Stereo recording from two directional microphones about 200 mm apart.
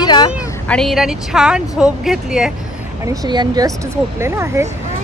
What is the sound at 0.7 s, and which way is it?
Speech, centre (ahead or behind).